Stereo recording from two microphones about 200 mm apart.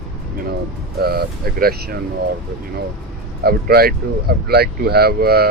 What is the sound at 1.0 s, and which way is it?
Speech, 50° right (ahead or behind).